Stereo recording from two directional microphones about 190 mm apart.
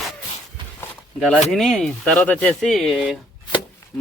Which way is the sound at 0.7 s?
5° left (ahead or behind).